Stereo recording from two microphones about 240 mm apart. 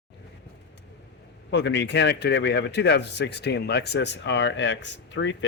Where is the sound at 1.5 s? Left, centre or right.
Left.